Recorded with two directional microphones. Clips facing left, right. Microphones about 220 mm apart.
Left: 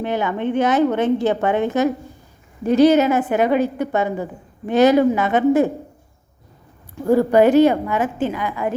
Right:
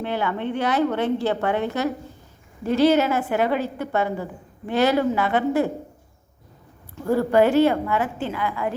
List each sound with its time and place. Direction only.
0.0 s a woman's voice: 15° left (ahead or behind)
6.9 s a woman's voice: 15° left (ahead or behind)